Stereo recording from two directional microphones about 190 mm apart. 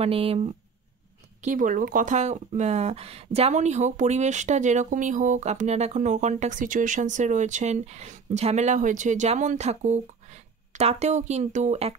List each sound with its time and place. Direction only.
0.0 s speech: 30° right (ahead or behind)
1.4 s speech: 45° right (ahead or behind)